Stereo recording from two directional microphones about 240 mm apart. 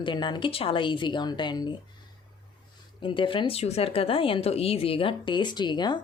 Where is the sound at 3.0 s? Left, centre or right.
Left.